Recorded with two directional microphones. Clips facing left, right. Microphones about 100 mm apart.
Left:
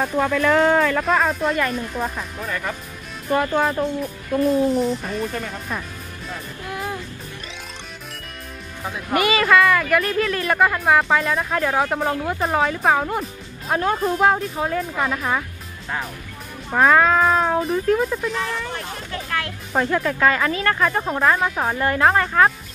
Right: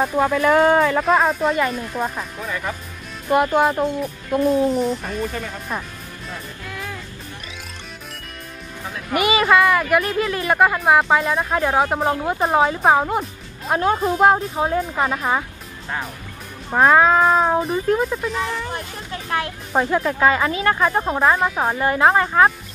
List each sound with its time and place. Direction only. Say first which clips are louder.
0.0 s speech: right 2 dB; 10° right (ahead or behind)
1.0 s speech: right 2 dB; centre (ahead or behind)
3.3 s speech: right 3 dB; 20° right (ahead or behind)
4.4 s speech: even; centre (ahead or behind)
6.7 s music: left 5 dB; 25° left (ahead or behind)
9.2 s speech: right 1 dB; 20° right (ahead or behind)
13.2 s speech: even; 10° right (ahead or behind)
14.2 s speech: right 4 dB; 25° right (ahead or behind)
16.7 s speech: right 2 dB; 10° right (ahead or behind)
19.2 s speech: right 5 dB; 20° right (ahead or behind)